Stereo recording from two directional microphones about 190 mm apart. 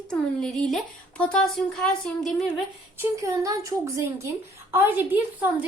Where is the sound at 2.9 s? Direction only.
15° right (ahead or behind).